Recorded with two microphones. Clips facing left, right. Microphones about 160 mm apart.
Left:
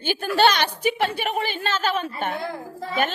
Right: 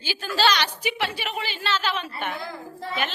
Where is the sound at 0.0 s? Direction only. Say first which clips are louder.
Left 5 dB; 55° left (ahead or behind).